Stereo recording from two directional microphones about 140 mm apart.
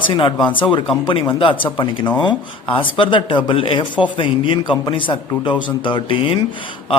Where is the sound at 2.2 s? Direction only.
40° left (ahead or behind).